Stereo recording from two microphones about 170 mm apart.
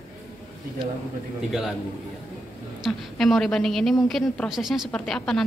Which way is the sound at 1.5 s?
Centre (ahead or behind).